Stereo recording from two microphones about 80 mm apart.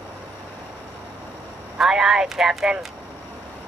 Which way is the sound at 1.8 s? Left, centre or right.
Centre.